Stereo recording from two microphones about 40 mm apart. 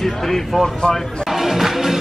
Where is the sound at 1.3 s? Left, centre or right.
Centre.